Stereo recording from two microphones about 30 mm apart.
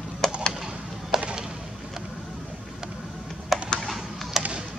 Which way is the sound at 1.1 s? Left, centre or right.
Centre.